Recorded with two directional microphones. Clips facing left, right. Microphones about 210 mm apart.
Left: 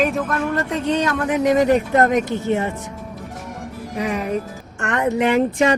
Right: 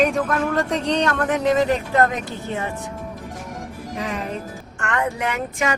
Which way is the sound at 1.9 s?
20° left (ahead or behind).